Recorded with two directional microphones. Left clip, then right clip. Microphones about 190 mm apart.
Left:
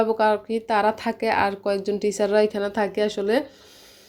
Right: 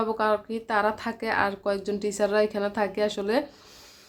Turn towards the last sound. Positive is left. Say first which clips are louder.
# left 3 dB
turn(degrees=10)  # may be behind; listen again after turning